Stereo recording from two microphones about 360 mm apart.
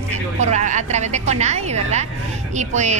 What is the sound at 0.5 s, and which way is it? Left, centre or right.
A woman's voice, centre.